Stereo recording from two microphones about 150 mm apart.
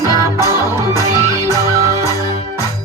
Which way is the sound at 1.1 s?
25° left (ahead or behind).